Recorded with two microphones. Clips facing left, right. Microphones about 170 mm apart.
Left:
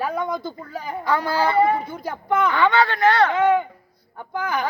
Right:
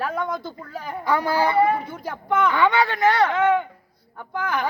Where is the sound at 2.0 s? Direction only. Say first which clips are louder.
Even; 5° left (ahead or behind).